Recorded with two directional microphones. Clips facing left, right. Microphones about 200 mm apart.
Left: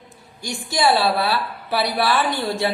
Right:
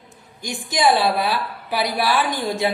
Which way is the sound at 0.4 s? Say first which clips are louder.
Right 1 dB; 15° right (ahead or behind).